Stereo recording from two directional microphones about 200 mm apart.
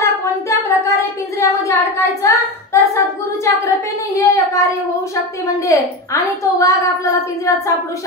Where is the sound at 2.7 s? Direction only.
15° left (ahead or behind).